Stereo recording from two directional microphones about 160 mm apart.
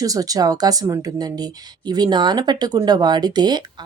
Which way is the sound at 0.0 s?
20° right (ahead or behind).